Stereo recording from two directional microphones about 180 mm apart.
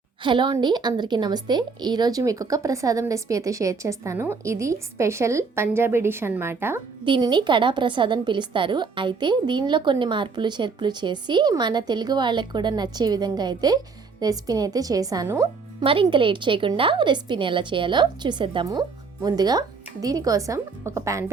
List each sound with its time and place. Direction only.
0.2 s a woman's voice: 25° right (ahead or behind)
7.0 s a woman's voice: 25° right (ahead or behind)
15.8 s a woman's voice: 30° right (ahead or behind)